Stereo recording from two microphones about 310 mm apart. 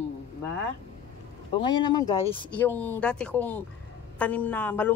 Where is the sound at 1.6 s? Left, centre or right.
Centre.